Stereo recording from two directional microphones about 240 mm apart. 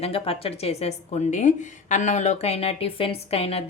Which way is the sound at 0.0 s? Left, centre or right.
Left.